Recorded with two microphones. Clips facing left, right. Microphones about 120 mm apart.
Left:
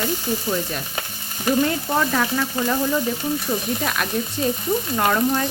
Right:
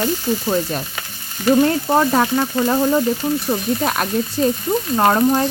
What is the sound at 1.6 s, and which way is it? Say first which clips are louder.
Speech: right 5 dB; 40° right (ahead or behind).